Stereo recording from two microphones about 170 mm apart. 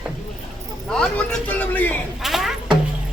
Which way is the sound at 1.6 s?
10° left (ahead or behind).